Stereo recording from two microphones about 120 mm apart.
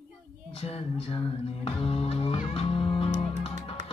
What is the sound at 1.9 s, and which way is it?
Music, 50° left (ahead or behind).